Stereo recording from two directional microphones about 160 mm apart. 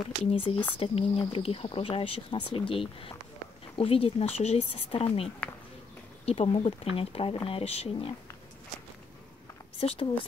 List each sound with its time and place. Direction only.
0.2 s speech: 35° left (ahead or behind)
9.8 s speech: 40° left (ahead or behind)